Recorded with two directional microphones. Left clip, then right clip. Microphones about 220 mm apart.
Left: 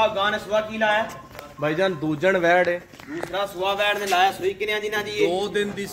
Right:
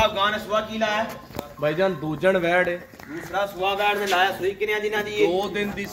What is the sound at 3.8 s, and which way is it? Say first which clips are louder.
Speech: left 1 dB; 45° left (ahead or behind).